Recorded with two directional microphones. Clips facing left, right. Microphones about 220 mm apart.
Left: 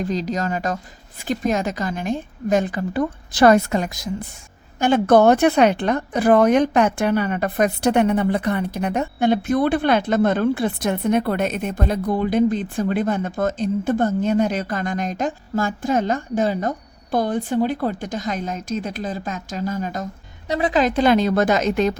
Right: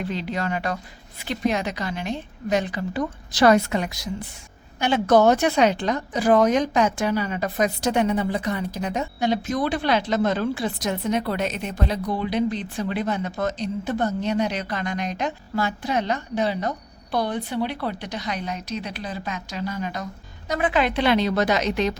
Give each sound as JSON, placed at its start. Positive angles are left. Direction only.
{"t": 0.0, "sound": "a woman's voice", "side_deg": 40}